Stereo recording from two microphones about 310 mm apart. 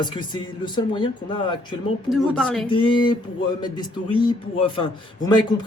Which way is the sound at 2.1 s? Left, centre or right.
Centre.